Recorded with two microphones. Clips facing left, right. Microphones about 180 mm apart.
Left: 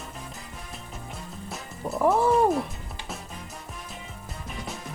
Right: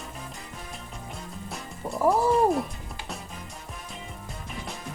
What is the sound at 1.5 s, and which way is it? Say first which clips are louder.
Speech: left 2 dB; centre (ahead or behind).